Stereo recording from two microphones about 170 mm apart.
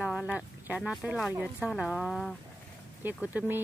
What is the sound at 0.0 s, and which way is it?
A woman's voice, 5° right (ahead or behind).